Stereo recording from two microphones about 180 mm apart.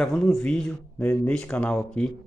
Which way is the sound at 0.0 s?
5° left (ahead or behind).